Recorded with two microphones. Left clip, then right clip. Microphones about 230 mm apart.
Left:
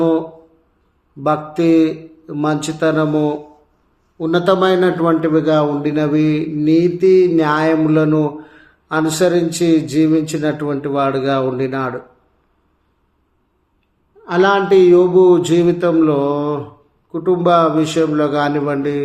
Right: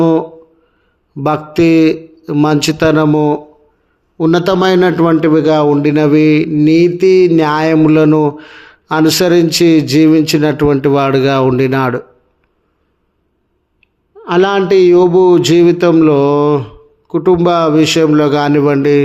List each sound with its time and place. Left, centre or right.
1.2 s a man's voice: right
14.3 s a man's voice: right